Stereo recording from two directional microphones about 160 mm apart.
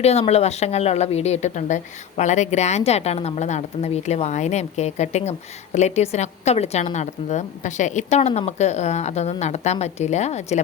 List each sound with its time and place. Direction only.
0.0 s speech: 40° left (ahead or behind)